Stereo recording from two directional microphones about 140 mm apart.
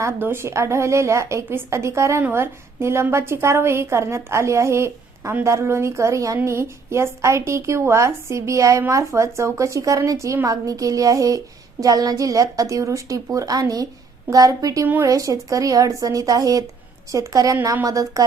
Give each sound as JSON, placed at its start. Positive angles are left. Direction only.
{"t": 0.0, "sound": "a woman's voice", "side_deg": -15}